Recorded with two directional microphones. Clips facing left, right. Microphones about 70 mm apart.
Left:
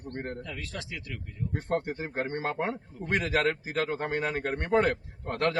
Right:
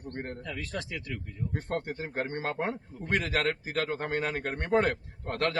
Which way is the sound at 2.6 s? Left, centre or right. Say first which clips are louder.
Left 1 dB; centre.